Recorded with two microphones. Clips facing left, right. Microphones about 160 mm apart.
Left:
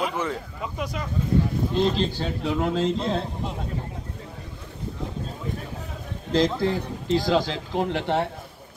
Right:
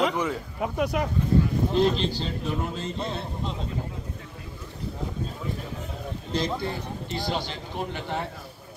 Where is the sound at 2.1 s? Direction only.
75° left (ahead or behind); by 3.2 s 90° left.